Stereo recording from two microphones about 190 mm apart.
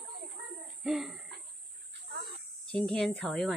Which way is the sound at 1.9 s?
60° right (ahead or behind).